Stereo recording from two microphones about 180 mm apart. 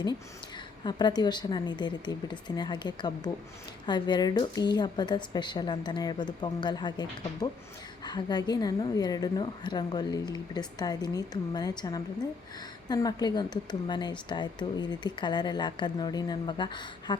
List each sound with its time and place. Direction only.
0.9 s speech: 25° left (ahead or behind)